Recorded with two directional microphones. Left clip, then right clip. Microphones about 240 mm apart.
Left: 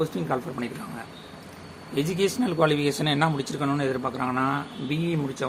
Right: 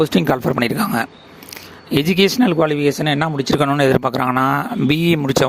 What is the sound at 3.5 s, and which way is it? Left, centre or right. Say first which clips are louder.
Speech: right 12 dB; right.